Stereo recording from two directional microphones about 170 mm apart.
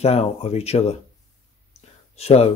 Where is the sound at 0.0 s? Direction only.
35° left (ahead or behind).